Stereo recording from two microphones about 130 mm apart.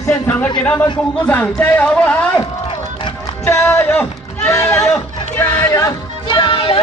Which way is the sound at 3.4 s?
15° left (ahead or behind).